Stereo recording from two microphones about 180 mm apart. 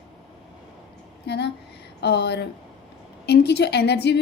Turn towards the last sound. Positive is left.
turn(degrees=65)  # may be behind; listen again after turning